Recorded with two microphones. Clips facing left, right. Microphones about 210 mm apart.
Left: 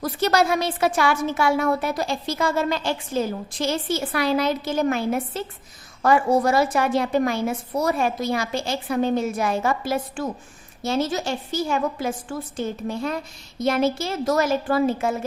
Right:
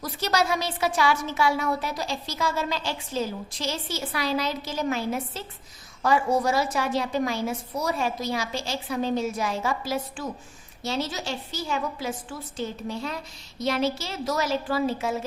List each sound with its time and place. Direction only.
0.0 s a woman's voice: 55° left (ahead or behind)